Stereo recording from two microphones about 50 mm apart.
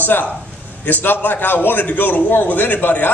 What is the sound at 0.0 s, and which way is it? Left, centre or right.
A man's voice, left.